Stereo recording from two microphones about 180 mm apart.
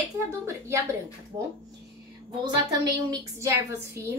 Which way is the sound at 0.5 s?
15° right (ahead or behind).